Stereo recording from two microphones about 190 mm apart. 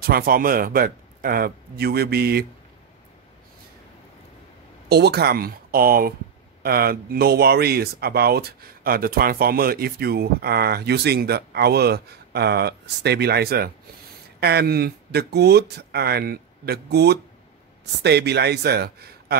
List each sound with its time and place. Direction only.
0.0 s speech: 50° right (ahead or behind)
4.8 s speech: 60° right (ahead or behind)